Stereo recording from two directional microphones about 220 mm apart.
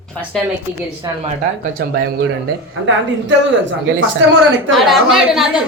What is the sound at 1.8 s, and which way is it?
Speech, 45° right (ahead or behind).